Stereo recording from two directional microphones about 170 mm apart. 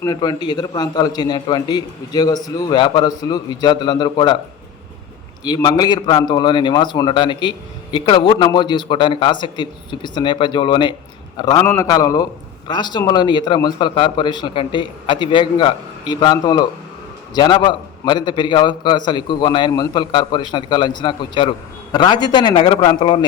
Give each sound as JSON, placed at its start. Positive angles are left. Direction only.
{"t": 0.0, "sound": "a man's voice", "side_deg": 25}
{"t": 5.5, "sound": "a man's voice", "side_deg": 25}